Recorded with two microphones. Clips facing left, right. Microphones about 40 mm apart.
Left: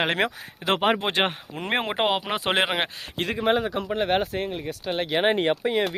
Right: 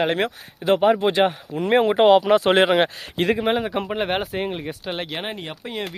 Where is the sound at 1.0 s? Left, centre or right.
Left.